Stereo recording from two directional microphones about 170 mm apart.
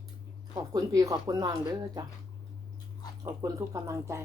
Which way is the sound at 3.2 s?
20° right (ahead or behind).